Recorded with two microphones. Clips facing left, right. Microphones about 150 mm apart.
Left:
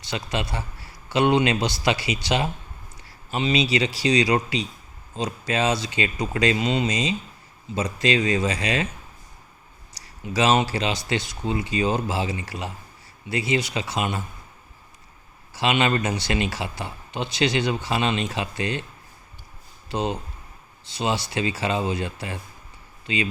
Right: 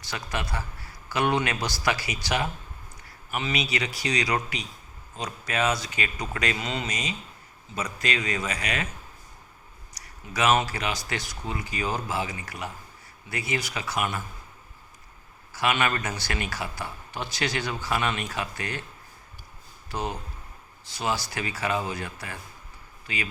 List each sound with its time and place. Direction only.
0.0 s speech: 25° left (ahead or behind)
9.9 s speech: 25° left (ahead or behind)
15.5 s speech: 25° left (ahead or behind)
19.9 s speech: 20° left (ahead or behind)